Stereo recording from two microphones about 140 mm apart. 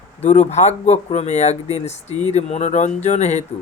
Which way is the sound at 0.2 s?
55° left (ahead or behind).